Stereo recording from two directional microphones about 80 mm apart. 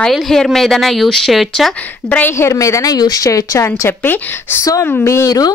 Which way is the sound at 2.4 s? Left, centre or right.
Left.